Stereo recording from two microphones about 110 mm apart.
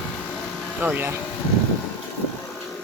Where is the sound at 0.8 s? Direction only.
15° right (ahead or behind).